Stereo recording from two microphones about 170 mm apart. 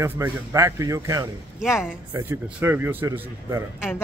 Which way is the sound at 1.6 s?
Centre (ahead or behind).